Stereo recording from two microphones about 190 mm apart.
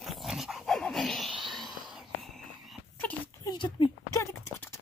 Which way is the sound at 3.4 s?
25° left (ahead or behind).